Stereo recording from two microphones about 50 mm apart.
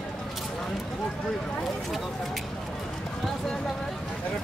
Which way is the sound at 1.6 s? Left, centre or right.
Centre.